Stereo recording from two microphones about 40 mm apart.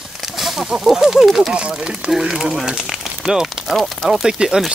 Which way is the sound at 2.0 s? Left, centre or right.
Centre.